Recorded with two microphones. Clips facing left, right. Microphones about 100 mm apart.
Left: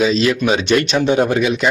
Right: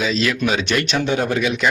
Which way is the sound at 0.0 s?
25° left (ahead or behind).